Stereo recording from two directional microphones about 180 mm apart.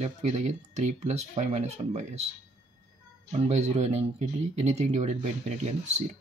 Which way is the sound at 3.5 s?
35° right (ahead or behind).